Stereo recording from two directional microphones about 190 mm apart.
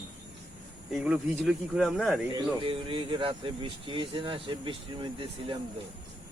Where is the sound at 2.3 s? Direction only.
25° right (ahead or behind).